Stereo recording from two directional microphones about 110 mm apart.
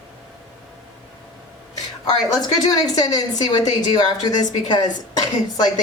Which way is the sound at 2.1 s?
35° left (ahead or behind).